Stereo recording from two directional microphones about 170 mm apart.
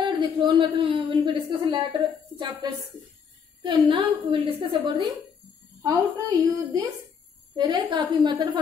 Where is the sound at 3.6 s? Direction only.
30° right (ahead or behind).